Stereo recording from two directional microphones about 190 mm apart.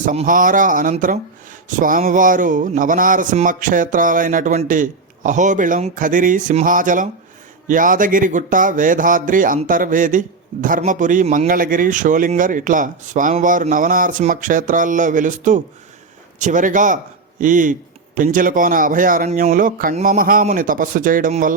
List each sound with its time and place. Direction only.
0.0 s speech: 40° right (ahead or behind)